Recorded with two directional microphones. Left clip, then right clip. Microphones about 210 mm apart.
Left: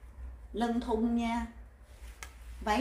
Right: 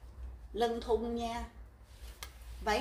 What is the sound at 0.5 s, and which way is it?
Speech, 25° left (ahead or behind).